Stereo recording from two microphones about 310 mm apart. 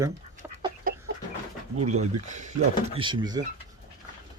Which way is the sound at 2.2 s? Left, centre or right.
Right.